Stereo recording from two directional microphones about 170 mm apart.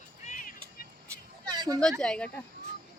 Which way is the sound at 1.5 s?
25° right (ahead or behind).